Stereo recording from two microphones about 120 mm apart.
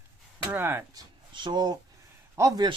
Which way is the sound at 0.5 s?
20° right (ahead or behind).